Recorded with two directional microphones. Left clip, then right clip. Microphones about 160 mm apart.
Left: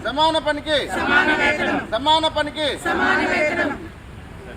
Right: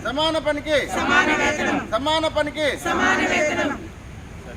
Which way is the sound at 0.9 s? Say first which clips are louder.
Left 2 dB; 10° left (ahead or behind).